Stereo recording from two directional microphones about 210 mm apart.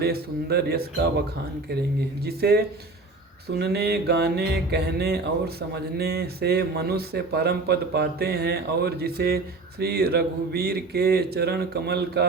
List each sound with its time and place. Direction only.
0.0 s speech: 50° right (ahead or behind)
2.2 s speech: 50° right (ahead or behind)
3.6 s speech: 50° right (ahead or behind)